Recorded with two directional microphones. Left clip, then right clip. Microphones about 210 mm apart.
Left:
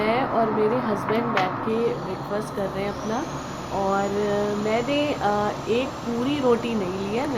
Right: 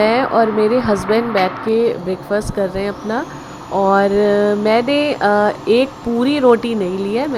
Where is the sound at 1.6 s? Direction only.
30° right (ahead or behind).